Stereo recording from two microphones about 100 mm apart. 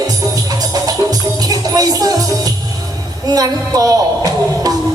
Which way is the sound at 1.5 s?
40° right (ahead or behind).